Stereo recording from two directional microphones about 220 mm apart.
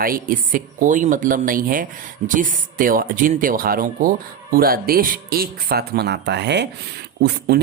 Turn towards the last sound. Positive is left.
turn(degrees=-45)  # may be behind; listen again after turning